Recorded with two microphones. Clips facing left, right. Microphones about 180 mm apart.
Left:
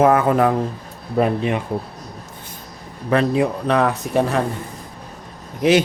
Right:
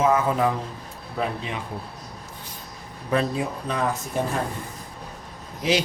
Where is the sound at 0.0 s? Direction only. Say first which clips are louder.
Left 6 dB; 60° left (ahead or behind).